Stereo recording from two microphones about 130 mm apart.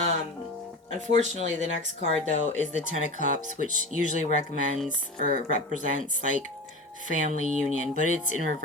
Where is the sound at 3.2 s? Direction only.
80° right.